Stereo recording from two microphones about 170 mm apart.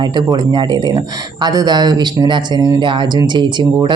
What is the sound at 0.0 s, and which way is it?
Speech, 25° right (ahead or behind).